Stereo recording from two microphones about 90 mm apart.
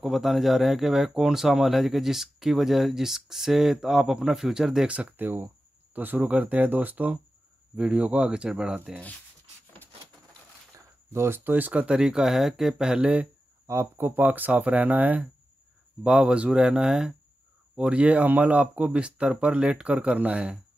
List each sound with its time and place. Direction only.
0.0 s speech: centre (ahead or behind)
11.1 s speech: 25° right (ahead or behind)
13.7 s speech: 30° right (ahead or behind)